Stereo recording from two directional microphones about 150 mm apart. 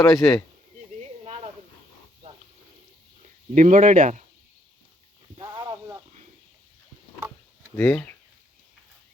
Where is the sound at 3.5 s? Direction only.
60° right (ahead or behind).